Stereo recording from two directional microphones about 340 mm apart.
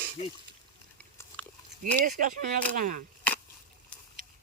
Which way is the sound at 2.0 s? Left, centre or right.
Right.